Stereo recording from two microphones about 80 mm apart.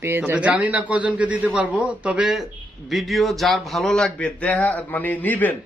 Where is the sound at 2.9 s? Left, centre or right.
Centre.